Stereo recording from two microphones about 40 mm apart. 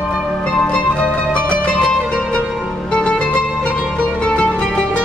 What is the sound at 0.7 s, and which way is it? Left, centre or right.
Music, left.